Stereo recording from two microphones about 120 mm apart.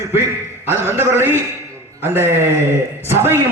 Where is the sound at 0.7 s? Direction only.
20° right (ahead or behind).